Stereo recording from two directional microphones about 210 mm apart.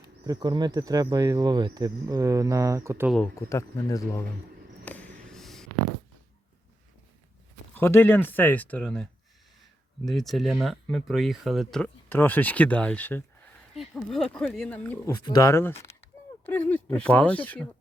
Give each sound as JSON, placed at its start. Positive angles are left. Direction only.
{"t": 0.0, "sound": "speech", "side_deg": -20}
{"t": 3.3, "sound": "speech", "side_deg": 15}
{"t": 4.9, "sound": "a sound", "side_deg": 5}
{"t": 7.8, "sound": "speech", "side_deg": 10}
{"t": 10.1, "sound": "speech", "side_deg": 0}